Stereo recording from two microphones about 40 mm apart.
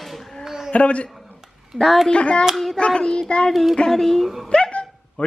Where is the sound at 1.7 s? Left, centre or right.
Centre.